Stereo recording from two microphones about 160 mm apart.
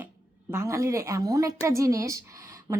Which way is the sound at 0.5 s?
15° right (ahead or behind).